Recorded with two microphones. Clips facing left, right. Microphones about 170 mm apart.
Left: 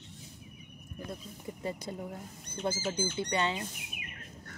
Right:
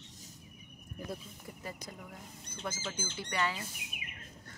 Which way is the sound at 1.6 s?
25° left (ahead or behind).